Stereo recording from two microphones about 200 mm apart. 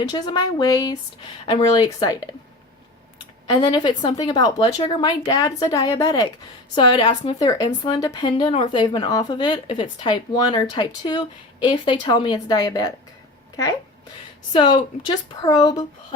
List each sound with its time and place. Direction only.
0.0 s speech: 20° left (ahead or behind)
14.5 s speech: 25° left (ahead or behind)